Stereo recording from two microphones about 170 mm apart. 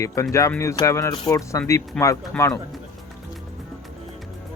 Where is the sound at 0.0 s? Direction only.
15° left (ahead or behind).